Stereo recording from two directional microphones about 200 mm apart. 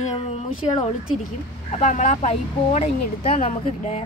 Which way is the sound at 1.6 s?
35° left (ahead or behind).